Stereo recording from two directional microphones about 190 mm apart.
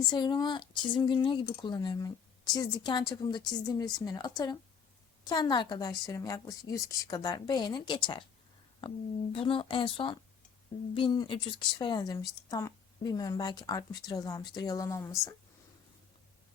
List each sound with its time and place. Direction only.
0.1 s speech: 20° left (ahead or behind)
9.3 s speech: 25° left (ahead or behind)